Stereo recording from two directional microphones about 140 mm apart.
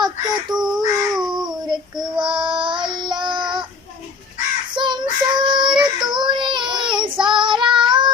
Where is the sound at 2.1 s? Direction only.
35° right (ahead or behind).